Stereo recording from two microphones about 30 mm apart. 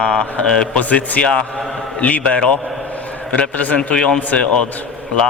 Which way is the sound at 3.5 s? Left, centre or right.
Left.